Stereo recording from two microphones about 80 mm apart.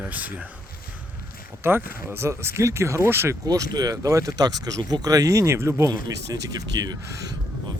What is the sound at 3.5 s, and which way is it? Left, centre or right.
Speech, right.